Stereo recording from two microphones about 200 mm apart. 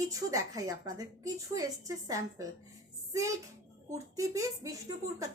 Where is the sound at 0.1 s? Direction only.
15° right (ahead or behind).